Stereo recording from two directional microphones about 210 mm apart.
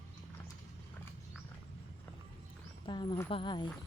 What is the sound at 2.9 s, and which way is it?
Speech, 20° left (ahead or behind).